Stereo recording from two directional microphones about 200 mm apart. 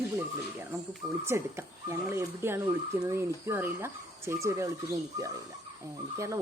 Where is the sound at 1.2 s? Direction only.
10° right (ahead or behind).